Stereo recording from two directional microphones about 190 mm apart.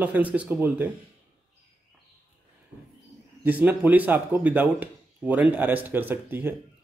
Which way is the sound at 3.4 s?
10° right (ahead or behind).